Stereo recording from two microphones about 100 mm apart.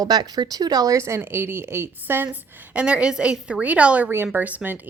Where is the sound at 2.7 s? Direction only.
10° right (ahead or behind).